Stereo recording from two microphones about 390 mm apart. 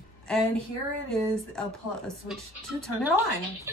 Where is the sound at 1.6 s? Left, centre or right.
Centre.